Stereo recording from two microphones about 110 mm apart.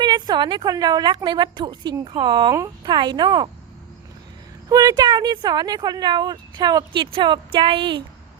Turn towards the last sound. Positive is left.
turn(degrees=-50)  # may be behind; listen again after turning